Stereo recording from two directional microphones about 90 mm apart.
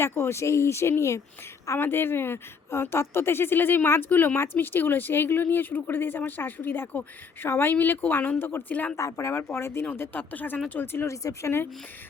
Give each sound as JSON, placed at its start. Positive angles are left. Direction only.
{"t": 0.0, "sound": "a woman's voice", "side_deg": 30}
{"t": 9.0, "sound": "a woman's voice", "side_deg": 35}